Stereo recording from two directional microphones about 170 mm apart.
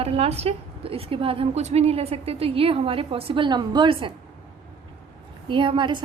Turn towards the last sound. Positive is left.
turn(degrees=-30)  # may be behind; listen again after turning